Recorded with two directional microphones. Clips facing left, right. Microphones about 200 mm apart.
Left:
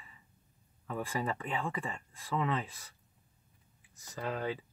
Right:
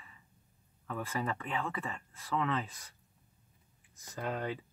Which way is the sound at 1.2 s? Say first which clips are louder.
Left 1 dB; 10° left (ahead or behind).